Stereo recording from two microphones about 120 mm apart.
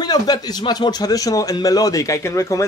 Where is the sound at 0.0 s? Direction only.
35° left (ahead or behind).